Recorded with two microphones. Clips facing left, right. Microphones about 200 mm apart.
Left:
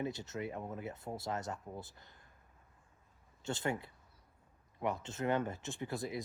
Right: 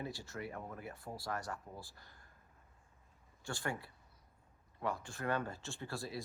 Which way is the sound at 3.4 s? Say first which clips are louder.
Left 4 dB; 20° left (ahead or behind).